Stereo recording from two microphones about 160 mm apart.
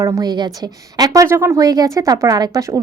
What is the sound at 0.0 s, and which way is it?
A woman's voice, 20° right (ahead or behind).